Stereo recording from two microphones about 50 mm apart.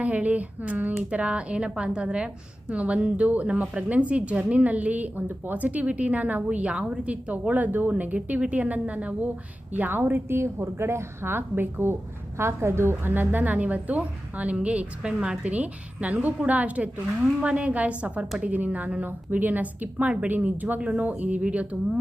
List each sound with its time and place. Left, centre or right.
0.0 s a woman's voice: right
9.7 s a woman's voice: right
10.3 s a woman's voice: right
11.3 s a woman's voice: right
12.4 s a woman's voice: right